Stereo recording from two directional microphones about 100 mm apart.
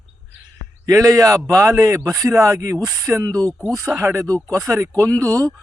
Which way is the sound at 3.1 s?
30° right (ahead or behind).